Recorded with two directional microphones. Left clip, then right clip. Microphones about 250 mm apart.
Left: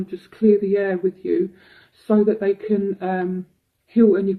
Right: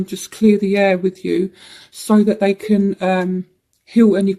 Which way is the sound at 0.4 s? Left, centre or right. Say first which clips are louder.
Right 3 dB; right.